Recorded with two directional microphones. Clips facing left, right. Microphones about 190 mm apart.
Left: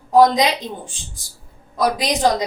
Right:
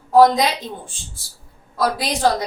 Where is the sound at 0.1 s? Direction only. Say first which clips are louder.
Even; 15° left (ahead or behind).